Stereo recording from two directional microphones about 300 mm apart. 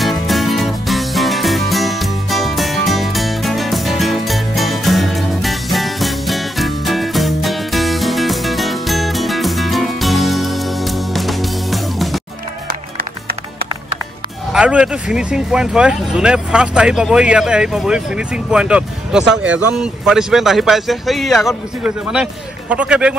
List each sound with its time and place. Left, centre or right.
0.0 s music: centre
14.5 s speech: centre